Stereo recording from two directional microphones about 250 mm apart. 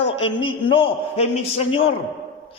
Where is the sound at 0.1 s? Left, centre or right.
Left.